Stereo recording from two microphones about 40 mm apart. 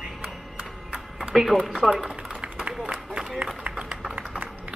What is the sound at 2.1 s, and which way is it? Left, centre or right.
Typing, right.